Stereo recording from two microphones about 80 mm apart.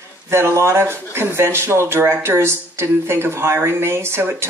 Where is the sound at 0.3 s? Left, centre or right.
Right.